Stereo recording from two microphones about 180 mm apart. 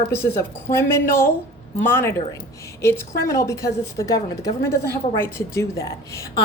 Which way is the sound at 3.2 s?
15° left (ahead or behind).